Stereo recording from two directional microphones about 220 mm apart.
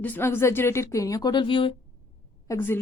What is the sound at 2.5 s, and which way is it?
Speech, 10° left (ahead or behind).